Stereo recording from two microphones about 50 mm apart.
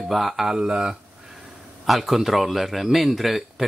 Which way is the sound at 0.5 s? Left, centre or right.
Centre.